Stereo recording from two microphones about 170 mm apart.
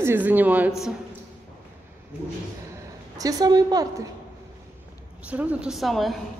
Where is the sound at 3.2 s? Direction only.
20° right (ahead or behind).